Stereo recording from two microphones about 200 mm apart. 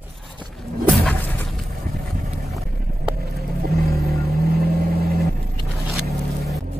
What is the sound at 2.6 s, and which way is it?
Vehicle, 50° right (ahead or behind).